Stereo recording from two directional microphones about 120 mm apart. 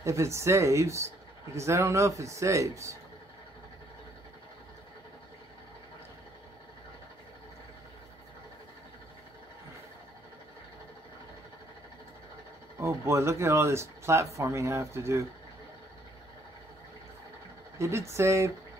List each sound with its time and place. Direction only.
0.0 s speech: 25° right (ahead or behind)
12.8 s speech: 20° right (ahead or behind)
17.7 s speech: 25° right (ahead or behind)